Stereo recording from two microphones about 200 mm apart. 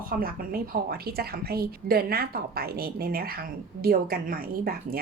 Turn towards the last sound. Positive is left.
turn(degrees=-45)  # may be behind; listen again after turning